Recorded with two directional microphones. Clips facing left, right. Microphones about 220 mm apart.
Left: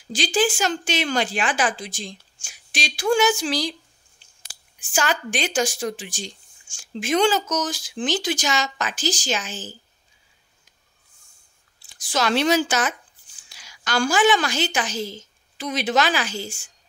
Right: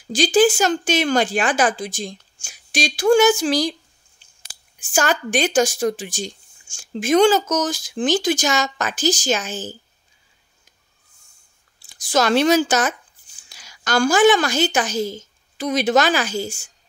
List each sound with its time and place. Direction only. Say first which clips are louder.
0.1 s speech: right 7 dB; 45° right (ahead or behind)
4.7 s speech: right 4 dB; 45° right (ahead or behind)
12.0 s a woman's voice: right 5 dB; 45° right (ahead or behind)